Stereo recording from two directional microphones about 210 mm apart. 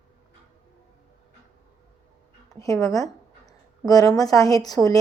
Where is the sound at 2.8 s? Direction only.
15° left (ahead or behind).